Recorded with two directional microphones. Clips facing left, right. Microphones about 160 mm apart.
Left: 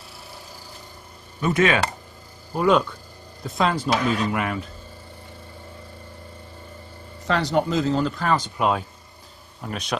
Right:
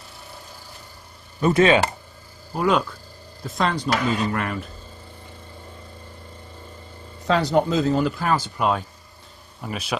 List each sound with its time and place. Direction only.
1.4 s speech: 30° right (ahead or behind)
2.5 s speech: centre (ahead or behind)
7.3 s speech: 5° right (ahead or behind)